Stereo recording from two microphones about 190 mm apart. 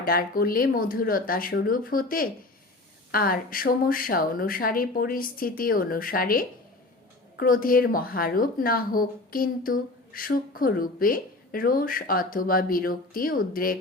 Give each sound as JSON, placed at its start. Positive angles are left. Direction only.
{"t": 0.0, "sound": "speech", "side_deg": 50}